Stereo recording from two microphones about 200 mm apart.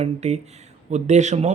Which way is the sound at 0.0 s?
35° right (ahead or behind).